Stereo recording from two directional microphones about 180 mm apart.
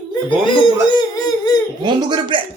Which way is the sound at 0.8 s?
25° left (ahead or behind).